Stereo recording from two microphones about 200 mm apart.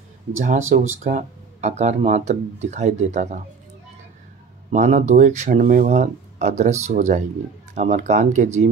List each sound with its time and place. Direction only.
0.7 s speech: 40° right (ahead or behind)
4.6 s speech: 35° right (ahead or behind)